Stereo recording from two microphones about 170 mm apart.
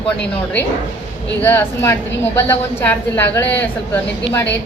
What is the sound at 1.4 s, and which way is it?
A woman's voice, 10° left (ahead or behind).